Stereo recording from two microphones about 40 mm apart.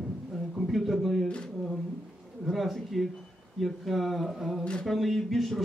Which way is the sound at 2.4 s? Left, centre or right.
Centre.